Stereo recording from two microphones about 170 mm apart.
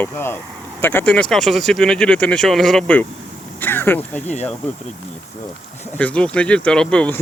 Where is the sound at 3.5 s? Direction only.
10° left (ahead or behind).